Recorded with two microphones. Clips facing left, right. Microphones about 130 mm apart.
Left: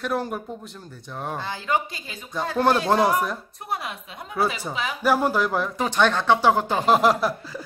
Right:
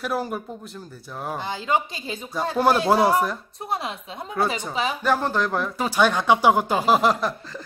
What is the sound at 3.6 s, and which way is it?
Speech, 25° right (ahead or behind).